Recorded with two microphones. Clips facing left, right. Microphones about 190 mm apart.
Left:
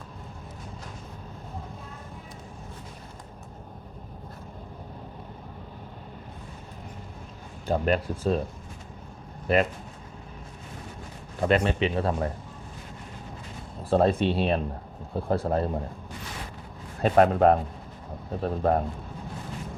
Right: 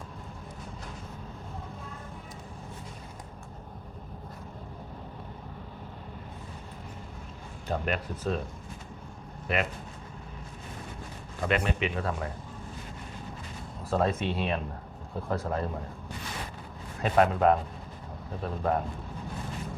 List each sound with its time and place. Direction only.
7.7 s speech: 30° left (ahead or behind)
9.5 s speech: 35° left (ahead or behind)
11.4 s speech: 35° left (ahead or behind)
13.9 s speech: 30° left (ahead or behind)
17.0 s speech: 40° left (ahead or behind)